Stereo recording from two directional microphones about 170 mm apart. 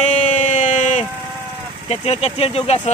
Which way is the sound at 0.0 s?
45° left (ahead or behind).